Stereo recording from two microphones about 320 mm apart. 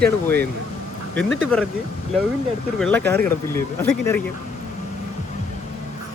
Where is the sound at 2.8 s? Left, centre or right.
Centre.